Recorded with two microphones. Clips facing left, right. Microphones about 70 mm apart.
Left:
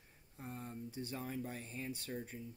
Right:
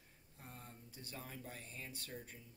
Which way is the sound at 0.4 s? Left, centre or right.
Left.